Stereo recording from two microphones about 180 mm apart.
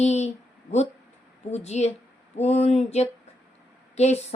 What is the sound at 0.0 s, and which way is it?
A woman's voice, 40° left (ahead or behind).